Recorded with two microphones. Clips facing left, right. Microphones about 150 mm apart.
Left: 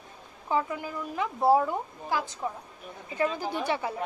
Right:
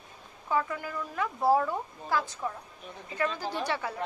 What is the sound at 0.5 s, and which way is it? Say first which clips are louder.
A woman's voice: left 1 dB; 20° left (ahead or behind).